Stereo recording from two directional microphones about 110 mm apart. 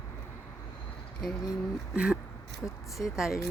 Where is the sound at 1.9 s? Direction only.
10° right (ahead or behind).